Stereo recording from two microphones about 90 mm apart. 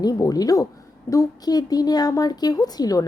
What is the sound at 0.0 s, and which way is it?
A woman's voice, 45° left (ahead or behind).